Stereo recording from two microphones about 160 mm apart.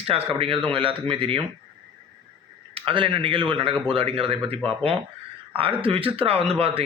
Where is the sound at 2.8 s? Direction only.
35° right (ahead or behind).